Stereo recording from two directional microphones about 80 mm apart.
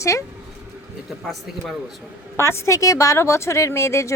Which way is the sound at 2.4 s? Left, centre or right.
Left.